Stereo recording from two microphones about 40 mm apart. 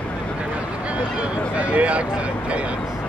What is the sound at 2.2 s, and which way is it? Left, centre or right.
Vehicle, right.